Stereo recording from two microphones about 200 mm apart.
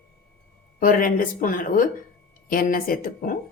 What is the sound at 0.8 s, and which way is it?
Speech, 45° left (ahead or behind).